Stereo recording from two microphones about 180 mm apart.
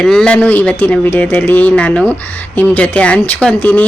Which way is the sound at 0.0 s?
5° left (ahead or behind).